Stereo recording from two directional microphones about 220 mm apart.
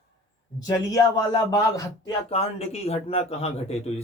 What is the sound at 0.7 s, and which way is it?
Speech, 15° left (ahead or behind).